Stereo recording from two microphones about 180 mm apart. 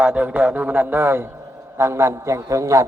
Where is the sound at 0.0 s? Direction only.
10° right (ahead or behind).